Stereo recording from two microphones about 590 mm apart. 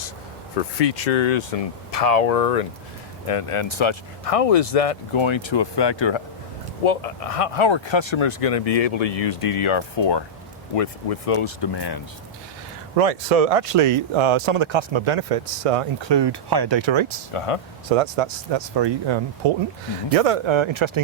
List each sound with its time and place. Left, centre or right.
1.2 s speech: left
3.2 s speech: left
6.8 s speech: left
10.8 s speech: left
13.0 s speech: right
17.3 s speech: left
17.8 s speech: right
20.1 s speech: right